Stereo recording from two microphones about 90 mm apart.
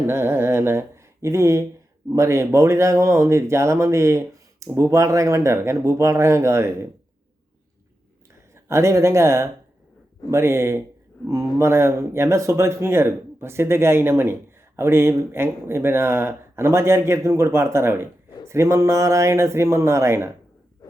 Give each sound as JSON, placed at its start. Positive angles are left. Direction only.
{"t": 0.1, "sound": "speech", "side_deg": -25}
{"t": 8.5, "sound": "speech", "side_deg": -30}